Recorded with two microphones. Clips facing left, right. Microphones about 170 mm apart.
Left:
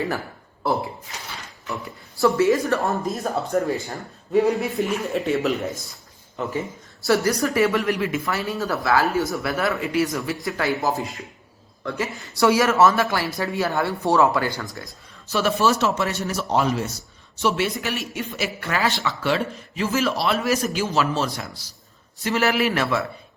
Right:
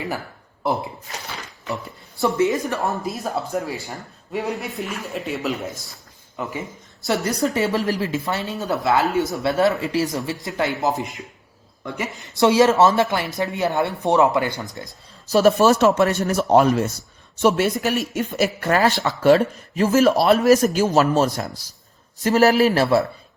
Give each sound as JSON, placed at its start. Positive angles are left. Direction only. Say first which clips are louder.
{"t": 0.6, "sound": "speech", "louder": "even", "side_deg": -20}
{"t": 2.2, "sound": "speech", "louder": "left 2 dB", "side_deg": -20}
{"t": 2.8, "sound": "speech", "louder": "left 1 dB", "side_deg": 0}
{"t": 7.0, "sound": "speech", "louder": "left 1 dB", "side_deg": -20}
{"t": 15.3, "sound": "speech", "louder": "right 6 dB", "side_deg": -40}
{"t": 17.7, "sound": "a man's voice", "louder": "right 6 dB", "side_deg": -40}